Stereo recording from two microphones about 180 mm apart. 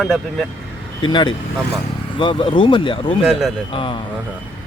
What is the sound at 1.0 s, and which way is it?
Speech, 25° left (ahead or behind).